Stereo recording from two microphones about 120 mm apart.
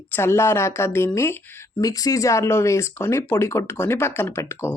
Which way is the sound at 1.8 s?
30° left (ahead or behind).